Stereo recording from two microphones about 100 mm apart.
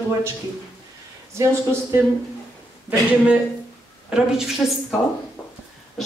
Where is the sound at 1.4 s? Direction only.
30° right (ahead or behind).